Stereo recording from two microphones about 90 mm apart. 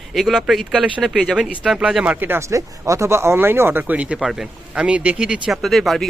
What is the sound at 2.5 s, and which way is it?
Speech, 35° right (ahead or behind).